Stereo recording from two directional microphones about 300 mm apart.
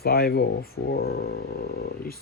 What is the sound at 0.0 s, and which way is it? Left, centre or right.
Speech, left.